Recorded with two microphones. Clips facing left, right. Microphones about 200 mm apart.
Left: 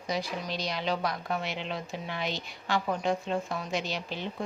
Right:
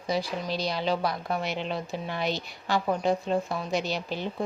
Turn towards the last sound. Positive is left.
turn(degrees=-40)  # may be behind; listen again after turning